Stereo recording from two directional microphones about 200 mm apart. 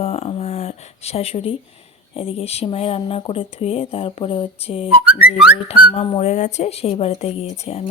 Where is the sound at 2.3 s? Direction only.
30° left (ahead or behind).